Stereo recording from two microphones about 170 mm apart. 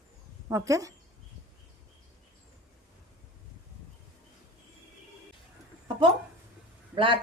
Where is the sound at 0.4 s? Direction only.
20° right (ahead or behind).